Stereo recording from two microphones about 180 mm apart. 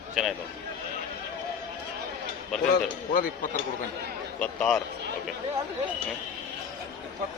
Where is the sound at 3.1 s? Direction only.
50° left (ahead or behind).